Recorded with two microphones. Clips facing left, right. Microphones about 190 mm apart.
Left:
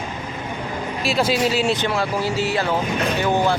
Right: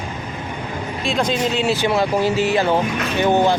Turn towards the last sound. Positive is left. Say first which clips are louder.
# right 3 dB
turn(degrees=-20)  # may be behind; listen again after turning